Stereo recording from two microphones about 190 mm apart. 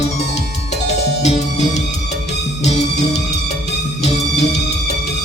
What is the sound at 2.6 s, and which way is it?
Music, 35° left (ahead or behind).